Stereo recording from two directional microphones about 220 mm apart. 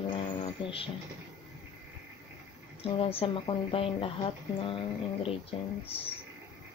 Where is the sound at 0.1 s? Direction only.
25° left (ahead or behind).